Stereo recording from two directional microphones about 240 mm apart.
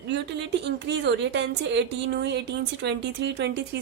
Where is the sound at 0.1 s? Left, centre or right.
Right.